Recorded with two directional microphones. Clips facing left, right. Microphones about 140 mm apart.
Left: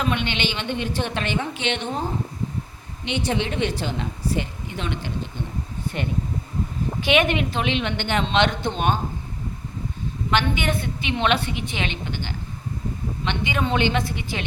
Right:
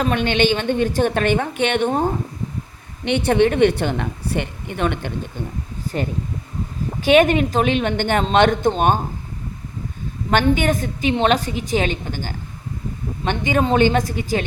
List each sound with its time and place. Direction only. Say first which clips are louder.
0.0 s a woman's voice: right 7 dB; 40° right (ahead or behind)
6.0 s a woman's voice: left 1 dB; 40° right (ahead or behind)
10.3 s a woman's voice: right 6 dB; 45° right (ahead or behind)